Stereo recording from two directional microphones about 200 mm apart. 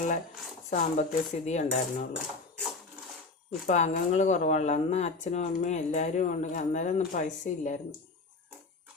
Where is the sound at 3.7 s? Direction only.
35° left (ahead or behind).